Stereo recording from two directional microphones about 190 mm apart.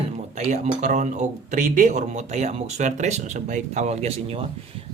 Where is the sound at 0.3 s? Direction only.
40° right (ahead or behind).